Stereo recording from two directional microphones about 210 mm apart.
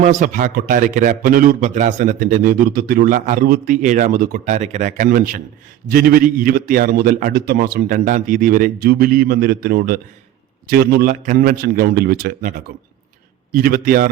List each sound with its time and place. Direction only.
0.0 s a man's voice: 35° right (ahead or behind)